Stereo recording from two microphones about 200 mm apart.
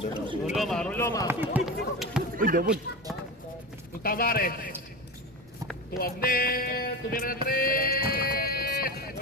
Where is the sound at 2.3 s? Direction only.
45° right (ahead or behind).